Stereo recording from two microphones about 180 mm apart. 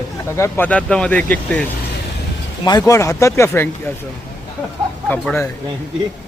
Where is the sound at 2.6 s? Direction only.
20° left (ahead or behind).